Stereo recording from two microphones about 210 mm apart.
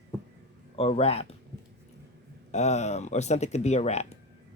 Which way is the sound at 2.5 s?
35° left (ahead or behind).